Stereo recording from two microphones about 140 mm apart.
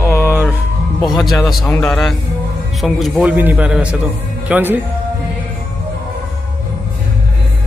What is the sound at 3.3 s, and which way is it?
Speech, 10° right (ahead or behind).